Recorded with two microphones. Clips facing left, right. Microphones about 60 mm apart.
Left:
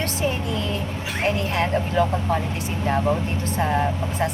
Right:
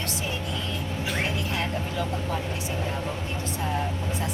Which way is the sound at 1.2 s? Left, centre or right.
Left.